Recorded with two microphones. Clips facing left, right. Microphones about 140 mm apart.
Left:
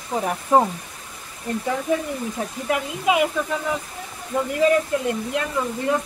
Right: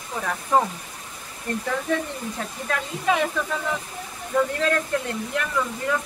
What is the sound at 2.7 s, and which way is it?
Speech, 15° left (ahead or behind).